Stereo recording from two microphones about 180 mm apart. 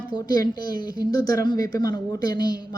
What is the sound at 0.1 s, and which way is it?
Speech, 25° left (ahead or behind).